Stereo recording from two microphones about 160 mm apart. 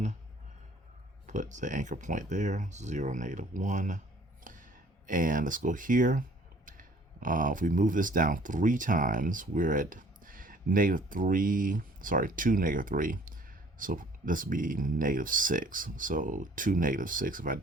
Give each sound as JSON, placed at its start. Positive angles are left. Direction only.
{"t": 1.3, "sound": "speech", "side_deg": -50}